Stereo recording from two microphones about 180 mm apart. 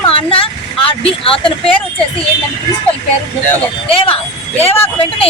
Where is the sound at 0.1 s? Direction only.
30° left (ahead or behind).